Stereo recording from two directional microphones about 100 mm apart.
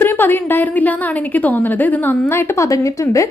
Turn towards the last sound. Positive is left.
turn(degrees=30)  # may be behind; listen again after turning